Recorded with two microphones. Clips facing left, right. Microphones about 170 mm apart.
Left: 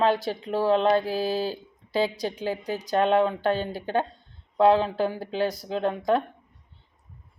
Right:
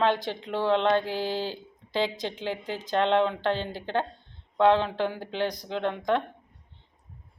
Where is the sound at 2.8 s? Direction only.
10° left (ahead or behind).